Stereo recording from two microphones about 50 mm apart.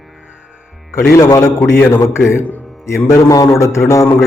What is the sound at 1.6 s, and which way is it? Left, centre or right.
Speech, left.